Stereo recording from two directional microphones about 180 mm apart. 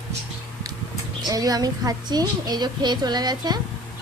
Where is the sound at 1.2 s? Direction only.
20° right (ahead or behind).